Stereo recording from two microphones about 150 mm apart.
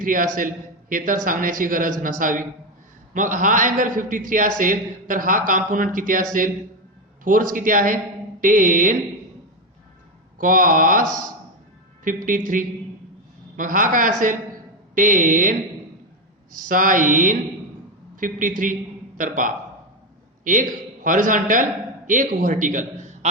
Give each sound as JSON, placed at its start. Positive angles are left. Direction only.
{"t": 0.0, "sound": "a man's voice", "side_deg": -65}
{"t": 7.3, "sound": "a man's voice", "side_deg": -65}
{"t": 10.3, "sound": "a man's voice", "side_deg": -65}
{"t": 12.0, "sound": "a man's voice", "side_deg": -65}
{"t": 16.6, "sound": "a man's voice", "side_deg": -65}